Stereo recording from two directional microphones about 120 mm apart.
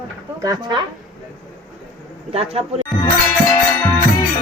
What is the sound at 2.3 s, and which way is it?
Speech, 55° right (ahead or behind).